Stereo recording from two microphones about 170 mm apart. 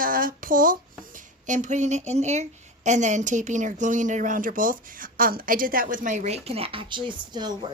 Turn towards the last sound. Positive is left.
turn(degrees=-25)  # may be behind; listen again after turning